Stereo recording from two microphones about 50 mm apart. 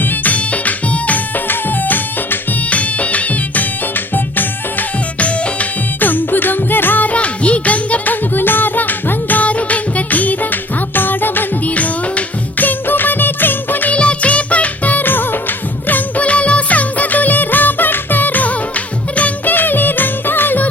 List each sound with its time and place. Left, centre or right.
0.0 s music: left
1.5 s music: left
13.9 s music: left